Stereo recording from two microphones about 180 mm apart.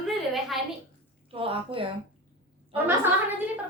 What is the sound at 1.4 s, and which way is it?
Speech, 30° right (ahead or behind).